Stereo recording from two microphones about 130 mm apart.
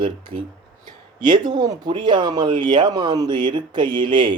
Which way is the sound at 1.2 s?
35° right (ahead or behind).